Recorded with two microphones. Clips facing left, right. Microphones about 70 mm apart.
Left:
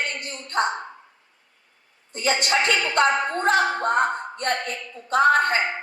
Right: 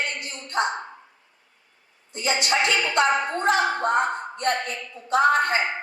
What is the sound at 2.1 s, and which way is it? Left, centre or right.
Music, left.